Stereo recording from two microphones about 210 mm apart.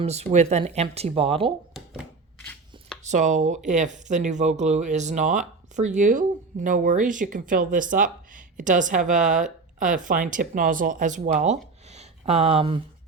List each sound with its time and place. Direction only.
0.0 s speech: 30° right (ahead or behind)
1.7 s a sound: 5° right (ahead or behind)
3.0 s speech: 35° right (ahead or behind)